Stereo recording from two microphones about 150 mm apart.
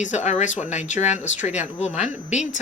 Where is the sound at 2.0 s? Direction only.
5° right (ahead or behind).